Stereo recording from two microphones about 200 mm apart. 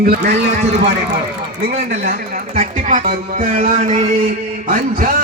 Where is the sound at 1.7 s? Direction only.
40° right (ahead or behind).